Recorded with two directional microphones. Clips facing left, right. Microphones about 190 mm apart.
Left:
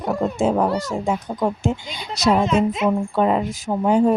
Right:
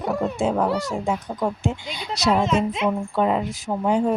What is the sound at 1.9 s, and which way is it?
Speech, 45° left (ahead or behind).